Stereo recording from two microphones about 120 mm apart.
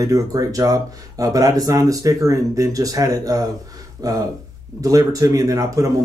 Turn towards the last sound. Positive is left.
turn(degrees=-30)  # may be behind; listen again after turning